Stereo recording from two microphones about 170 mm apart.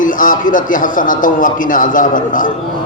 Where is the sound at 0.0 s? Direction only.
50° left (ahead or behind).